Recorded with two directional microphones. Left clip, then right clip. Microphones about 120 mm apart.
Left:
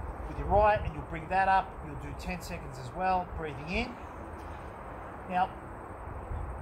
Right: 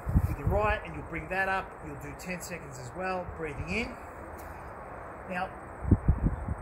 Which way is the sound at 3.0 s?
15° left (ahead or behind).